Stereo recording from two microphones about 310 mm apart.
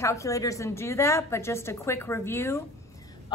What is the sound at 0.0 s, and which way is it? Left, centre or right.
A woman's voice, centre.